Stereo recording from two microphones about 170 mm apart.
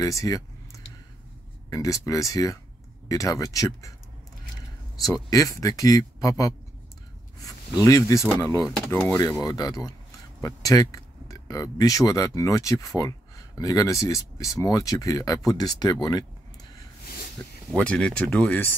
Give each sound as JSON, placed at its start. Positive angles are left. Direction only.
{"t": 0.0, "sound": "speech", "side_deg": 20}
{"t": 1.7, "sound": "speech", "side_deg": 20}
{"t": 5.0, "sound": "speech", "side_deg": 20}
{"t": 7.8, "sound": "speech", "side_deg": 20}
{"t": 17.7, "sound": "speech", "side_deg": 5}